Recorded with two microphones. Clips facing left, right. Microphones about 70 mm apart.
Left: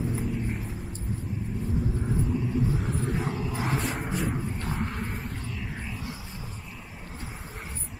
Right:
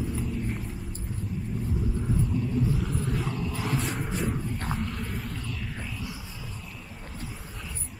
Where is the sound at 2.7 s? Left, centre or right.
Left.